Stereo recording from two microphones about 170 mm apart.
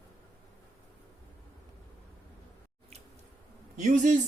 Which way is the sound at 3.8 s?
45° right (ahead or behind).